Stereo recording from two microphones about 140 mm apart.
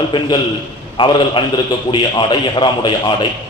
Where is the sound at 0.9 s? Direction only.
35° left (ahead or behind).